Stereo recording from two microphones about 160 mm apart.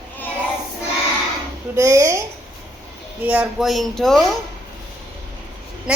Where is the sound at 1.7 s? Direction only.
20° right (ahead or behind).